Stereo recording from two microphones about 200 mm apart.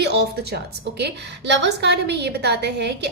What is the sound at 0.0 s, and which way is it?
A woman's voice, 55° right (ahead or behind).